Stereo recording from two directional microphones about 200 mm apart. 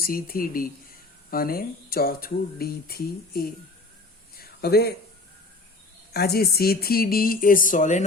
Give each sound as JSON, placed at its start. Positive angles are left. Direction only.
{"t": 0.0, "sound": "speech", "side_deg": 45}
{"t": 4.4, "sound": "a sound", "side_deg": 50}
{"t": 6.1, "sound": "speech", "side_deg": 50}